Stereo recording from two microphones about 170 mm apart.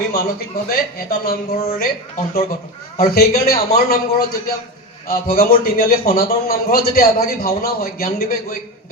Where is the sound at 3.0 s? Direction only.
60° left (ahead or behind).